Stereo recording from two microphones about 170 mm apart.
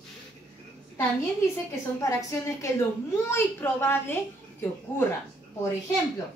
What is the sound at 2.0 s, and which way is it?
A woman's voice, 15° left (ahead or behind).